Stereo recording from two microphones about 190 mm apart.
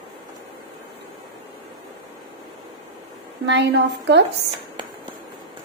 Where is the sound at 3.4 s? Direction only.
70° right (ahead or behind).